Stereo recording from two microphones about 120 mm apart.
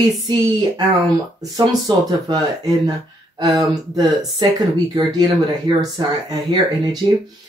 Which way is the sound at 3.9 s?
35° right (ahead or behind).